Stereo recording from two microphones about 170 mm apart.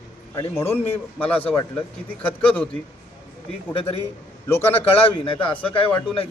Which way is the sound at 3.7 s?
30° left (ahead or behind).